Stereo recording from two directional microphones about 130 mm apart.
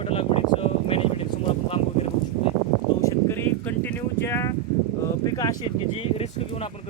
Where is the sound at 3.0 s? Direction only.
20° left (ahead or behind).